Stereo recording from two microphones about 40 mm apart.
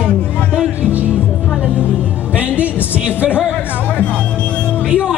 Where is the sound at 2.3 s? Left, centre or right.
Right.